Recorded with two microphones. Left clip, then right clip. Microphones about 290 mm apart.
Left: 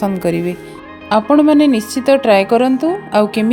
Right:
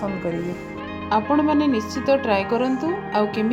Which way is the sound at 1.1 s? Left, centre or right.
Left.